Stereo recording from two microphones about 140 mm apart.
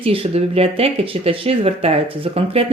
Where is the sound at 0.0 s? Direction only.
40° right (ahead or behind).